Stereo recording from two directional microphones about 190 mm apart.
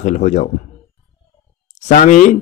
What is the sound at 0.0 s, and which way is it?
Speech, 40° left (ahead or behind).